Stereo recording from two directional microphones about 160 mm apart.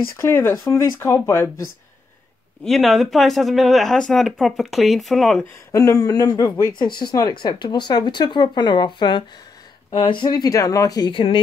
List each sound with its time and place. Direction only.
0.2 s speech: 15° left (ahead or behind)
2.6 s speech: centre (ahead or behind)
5.4 s speech: 20° left (ahead or behind)